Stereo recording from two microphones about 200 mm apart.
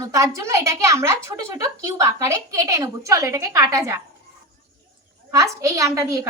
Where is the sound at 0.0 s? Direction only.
15° right (ahead or behind).